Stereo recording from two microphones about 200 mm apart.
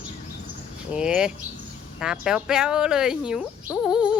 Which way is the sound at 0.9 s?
5° right (ahead or behind).